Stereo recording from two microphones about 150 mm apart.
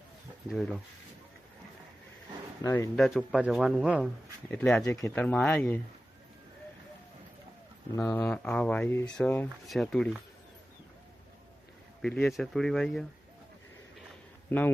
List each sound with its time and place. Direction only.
0.4 s speech: centre (ahead or behind)
2.6 s speech: 20° left (ahead or behind)
2.9 s speech: centre (ahead or behind)
4.5 s speech: 5° left (ahead or behind)
4.9 s speech: 20° left (ahead or behind)
5.2 s speech: 5° left (ahead or behind)
7.9 s speech: 15° left (ahead or behind)
12.0 s speech: 5° left (ahead or behind)
14.5 s speech: 10° left (ahead or behind)